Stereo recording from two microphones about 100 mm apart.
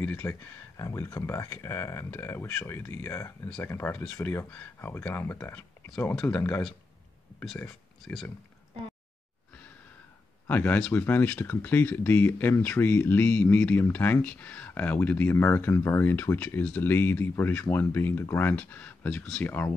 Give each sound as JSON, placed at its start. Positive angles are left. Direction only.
{"t": 0.0, "sound": "speech", "side_deg": 20}
{"t": 6.3, "sound": "speech", "side_deg": 10}
{"t": 8.0, "sound": "speech", "side_deg": 5}
{"t": 10.5, "sound": "speech", "side_deg": 15}